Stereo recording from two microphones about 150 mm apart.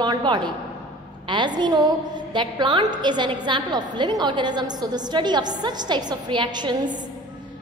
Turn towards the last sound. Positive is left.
turn(degrees=-30)  # may be behind; listen again after turning